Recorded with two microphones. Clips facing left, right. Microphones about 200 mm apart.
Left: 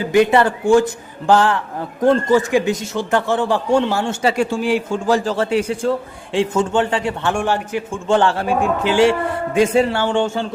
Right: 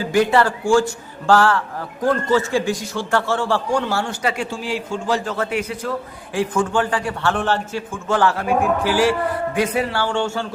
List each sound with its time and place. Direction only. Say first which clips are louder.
0.0 s a man's voice: left 3 dB; 20° left (ahead or behind)
4.6 s a man's voice: left 6 dB; 50° left (ahead or behind)
5.2 s a man's voice: left 5 dB; 30° left (ahead or behind)